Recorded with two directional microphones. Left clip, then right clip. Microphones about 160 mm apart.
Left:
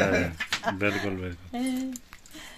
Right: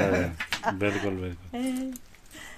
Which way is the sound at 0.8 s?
5° right (ahead or behind).